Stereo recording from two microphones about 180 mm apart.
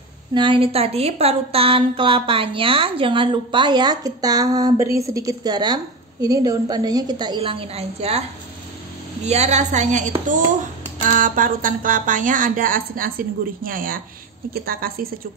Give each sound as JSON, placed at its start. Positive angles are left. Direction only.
{"t": 0.3, "sound": "a woman's voice", "side_deg": -25}
{"t": 9.2, "sound": "a woman's voice", "side_deg": -40}